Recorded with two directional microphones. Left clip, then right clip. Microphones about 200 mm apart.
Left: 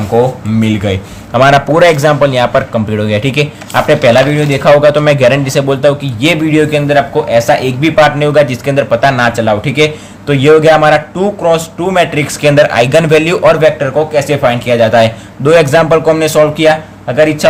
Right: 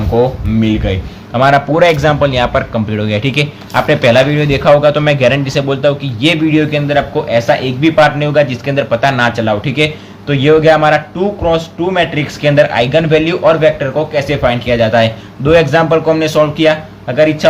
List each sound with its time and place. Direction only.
0.1 s speech: 20° left (ahead or behind)